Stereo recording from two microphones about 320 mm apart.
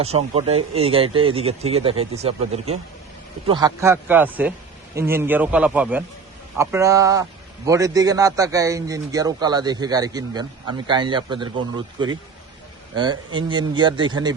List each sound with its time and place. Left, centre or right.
0.0 s a man's voice: centre